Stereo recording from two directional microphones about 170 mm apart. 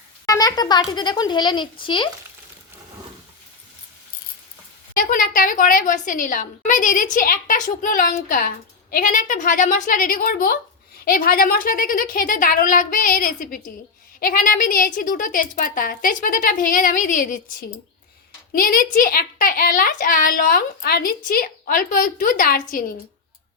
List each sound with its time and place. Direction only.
0.3 s a child's voice: 20° left (ahead or behind)
4.9 s a woman's voice: 55° left (ahead or behind)
18.5 s a child's voice: 60° left (ahead or behind)